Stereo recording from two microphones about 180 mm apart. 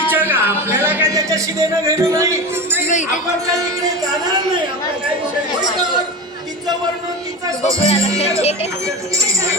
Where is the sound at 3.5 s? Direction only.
20° right (ahead or behind).